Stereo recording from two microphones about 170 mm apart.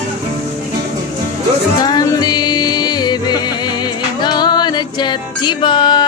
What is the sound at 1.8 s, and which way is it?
Music, 25° left (ahead or behind).